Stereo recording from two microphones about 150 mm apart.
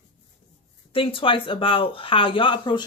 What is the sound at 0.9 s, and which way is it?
Speech, 35° left (ahead or behind).